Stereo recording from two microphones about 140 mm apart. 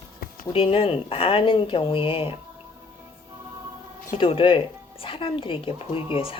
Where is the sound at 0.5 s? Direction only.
40° left (ahead or behind).